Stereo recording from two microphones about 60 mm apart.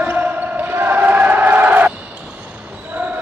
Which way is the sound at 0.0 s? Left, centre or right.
Right.